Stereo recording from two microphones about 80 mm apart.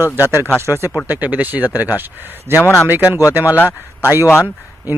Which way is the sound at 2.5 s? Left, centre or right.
Left.